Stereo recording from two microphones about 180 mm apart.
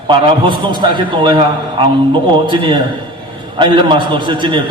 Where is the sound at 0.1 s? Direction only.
25° right (ahead or behind).